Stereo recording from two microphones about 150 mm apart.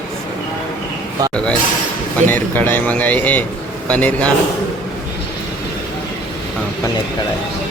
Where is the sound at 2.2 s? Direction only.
10° left (ahead or behind).